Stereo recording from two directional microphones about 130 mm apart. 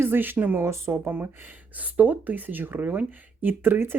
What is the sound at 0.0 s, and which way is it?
Speech, 15° right (ahead or behind).